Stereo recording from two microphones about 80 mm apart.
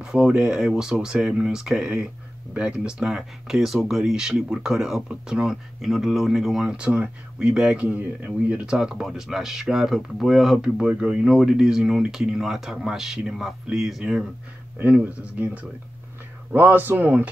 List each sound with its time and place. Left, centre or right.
0.0 s speech: centre
14.8 s speech: centre